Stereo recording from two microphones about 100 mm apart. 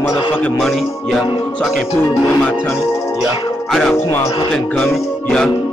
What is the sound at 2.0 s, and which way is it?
Music, 15° left (ahead or behind).